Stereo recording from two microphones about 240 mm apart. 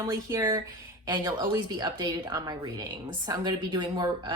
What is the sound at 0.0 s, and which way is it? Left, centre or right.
A woman's voice, centre.